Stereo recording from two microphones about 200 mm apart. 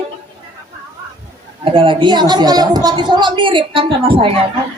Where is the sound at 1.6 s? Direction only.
25° right (ahead or behind).